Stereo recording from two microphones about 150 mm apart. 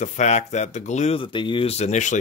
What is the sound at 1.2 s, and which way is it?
Speech, 35° left (ahead or behind).